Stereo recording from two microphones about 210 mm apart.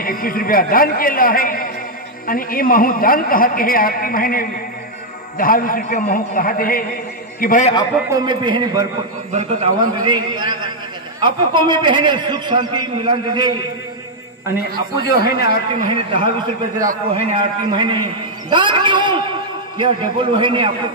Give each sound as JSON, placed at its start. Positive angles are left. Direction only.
{"t": 0.0, "sound": "a man's voice", "side_deg": 40}
{"t": 8.1, "sound": "a man's voice", "side_deg": -20}
{"t": 9.8, "sound": "a man's voice", "side_deg": -20}
{"t": 15.0, "sound": "a man's voice", "side_deg": 45}
{"t": 15.7, "sound": "a man's voice", "side_deg": -25}